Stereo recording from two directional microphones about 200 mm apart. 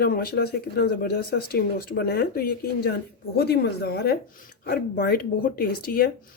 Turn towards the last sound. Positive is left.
turn(degrees=45)  # may be behind; listen again after turning